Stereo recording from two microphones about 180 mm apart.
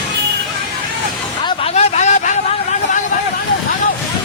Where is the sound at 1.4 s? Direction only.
35° left (ahead or behind).